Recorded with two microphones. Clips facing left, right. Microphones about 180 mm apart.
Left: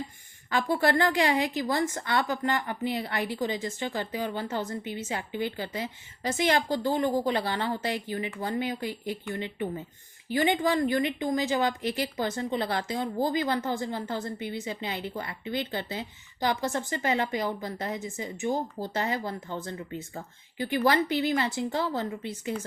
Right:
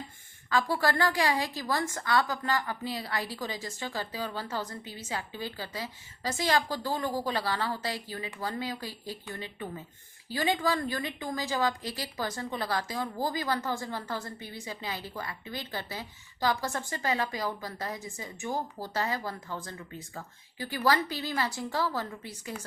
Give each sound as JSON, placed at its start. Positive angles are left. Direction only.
{"t": 0.5, "sound": "a woman's voice", "side_deg": 25}